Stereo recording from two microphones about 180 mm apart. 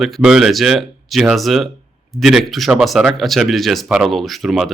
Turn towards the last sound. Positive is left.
turn(degrees=0)  # may be behind; listen again after turning